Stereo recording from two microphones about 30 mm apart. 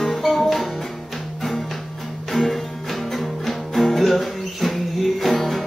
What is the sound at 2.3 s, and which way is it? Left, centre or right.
Music, centre.